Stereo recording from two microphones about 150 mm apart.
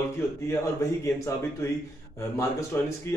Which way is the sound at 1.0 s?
20° left (ahead or behind).